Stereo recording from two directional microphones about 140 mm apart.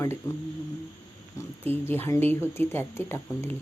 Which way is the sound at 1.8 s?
15° left (ahead or behind).